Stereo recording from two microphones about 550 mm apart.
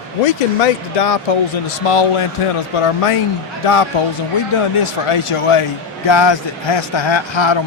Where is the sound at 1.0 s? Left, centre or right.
Left.